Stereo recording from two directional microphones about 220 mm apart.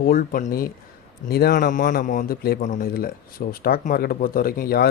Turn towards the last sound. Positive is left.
turn(degrees=45)  # may be behind; listen again after turning